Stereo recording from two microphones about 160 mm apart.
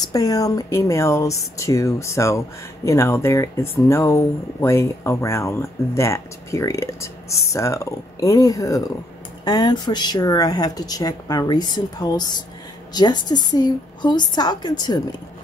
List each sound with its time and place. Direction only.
0.0 s speech: 20° left (ahead or behind)